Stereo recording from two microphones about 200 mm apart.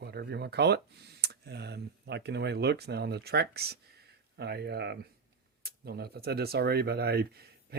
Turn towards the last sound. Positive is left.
turn(degrees=-50)  # may be behind; listen again after turning